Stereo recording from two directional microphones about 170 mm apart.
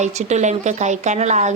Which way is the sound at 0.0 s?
45° right (ahead or behind).